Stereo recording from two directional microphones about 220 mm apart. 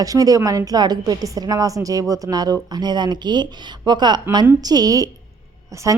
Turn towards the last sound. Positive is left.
turn(degrees=-15)  # may be behind; listen again after turning